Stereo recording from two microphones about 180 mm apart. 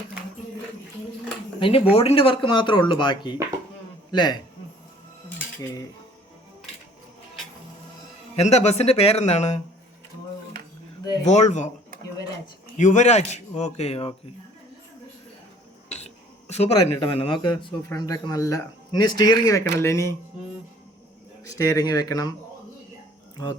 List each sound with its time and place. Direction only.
1.5 s speech: 30° left (ahead or behind)
8.4 s a man's voice: 35° left (ahead or behind)
11.0 s speech: 20° left (ahead or behind)
11.3 s a man's voice: 40° left (ahead or behind)
12.7 s a man's voice: 40° left (ahead or behind)
15.9 s speech: 40° left (ahead or behind); by 20.1 s 15° left (ahead or behind)
21.6 s speech: 20° left (ahead or behind)